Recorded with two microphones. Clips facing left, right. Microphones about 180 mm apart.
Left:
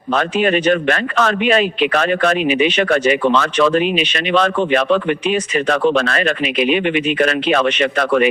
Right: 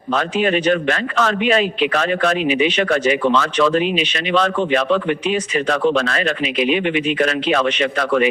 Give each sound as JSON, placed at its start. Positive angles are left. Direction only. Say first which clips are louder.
{"t": 0.1, "sound": "a man's voice", "louder": "left 2 dB", "side_deg": 60}